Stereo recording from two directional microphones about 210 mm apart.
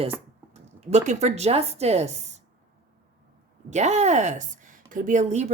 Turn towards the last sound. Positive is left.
turn(degrees=-35)  # may be behind; listen again after turning